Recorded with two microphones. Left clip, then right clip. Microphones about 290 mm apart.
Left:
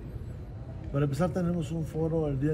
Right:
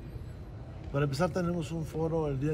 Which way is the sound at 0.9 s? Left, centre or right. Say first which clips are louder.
Even; centre.